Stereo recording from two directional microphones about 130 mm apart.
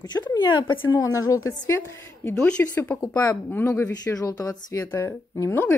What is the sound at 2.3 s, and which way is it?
Speech, 10° left (ahead or behind).